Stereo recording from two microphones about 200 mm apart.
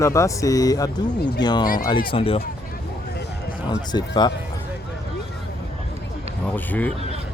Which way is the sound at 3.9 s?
20° left (ahead or behind).